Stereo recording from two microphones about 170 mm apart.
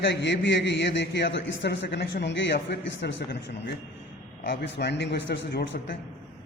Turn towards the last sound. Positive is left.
turn(degrees=80)